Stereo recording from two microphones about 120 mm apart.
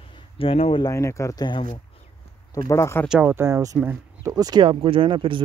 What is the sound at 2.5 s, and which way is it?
Speech, 25° left (ahead or behind).